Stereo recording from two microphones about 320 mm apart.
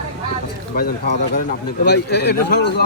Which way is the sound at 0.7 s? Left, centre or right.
Left.